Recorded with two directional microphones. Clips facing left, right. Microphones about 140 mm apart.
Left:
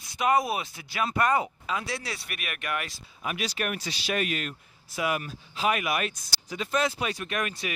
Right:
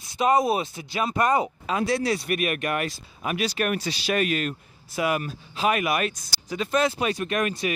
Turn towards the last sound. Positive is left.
turn(degrees=-40)  # may be behind; listen again after turning